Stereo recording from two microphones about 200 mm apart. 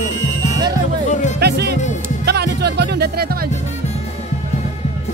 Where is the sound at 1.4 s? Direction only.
55° right (ahead or behind).